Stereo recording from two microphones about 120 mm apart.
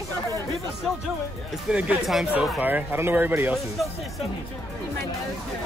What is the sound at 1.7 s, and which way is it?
Speech, 10° right (ahead or behind).